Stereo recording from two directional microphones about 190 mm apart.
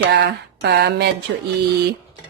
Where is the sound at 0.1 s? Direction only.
60° right (ahead or behind).